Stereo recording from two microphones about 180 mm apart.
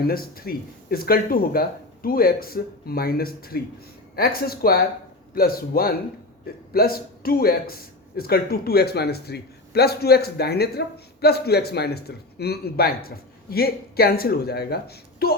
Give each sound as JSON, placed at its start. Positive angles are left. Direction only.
{"t": 0.1, "sound": "a man's voice", "side_deg": 55}